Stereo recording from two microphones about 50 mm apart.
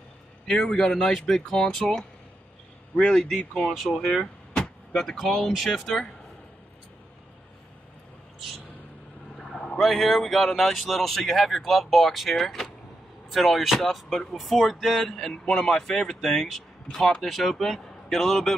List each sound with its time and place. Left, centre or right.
0.5 s speech: centre
3.0 s speech: centre
9.4 s speech: centre